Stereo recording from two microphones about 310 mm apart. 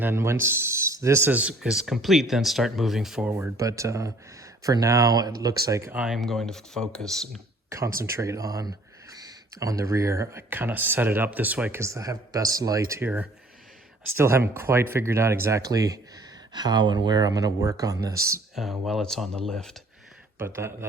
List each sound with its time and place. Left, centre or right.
0.0 s speech: centre
7.9 s speech: right
8.1 s speech: centre
18.5 s speech: centre
20.4 s speech: centre